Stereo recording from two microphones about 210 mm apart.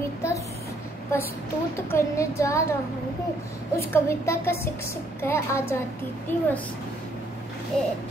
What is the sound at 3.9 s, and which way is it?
A child's voice, 10° left (ahead or behind).